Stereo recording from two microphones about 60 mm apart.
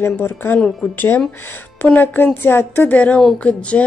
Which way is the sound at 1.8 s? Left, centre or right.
Left.